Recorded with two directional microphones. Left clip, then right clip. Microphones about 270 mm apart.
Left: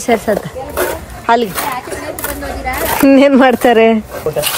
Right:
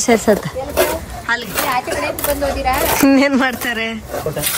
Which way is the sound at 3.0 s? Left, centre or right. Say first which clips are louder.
Left 8 dB; centre.